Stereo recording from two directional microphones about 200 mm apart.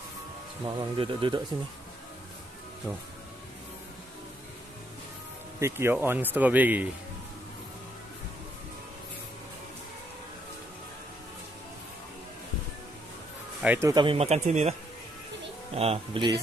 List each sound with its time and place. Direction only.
0.7 s speech: 25° right (ahead or behind)
5.6 s speech: 10° right (ahead or behind)
13.6 s speech: 10° right (ahead or behind)
14.0 s speech: 30° right (ahead or behind)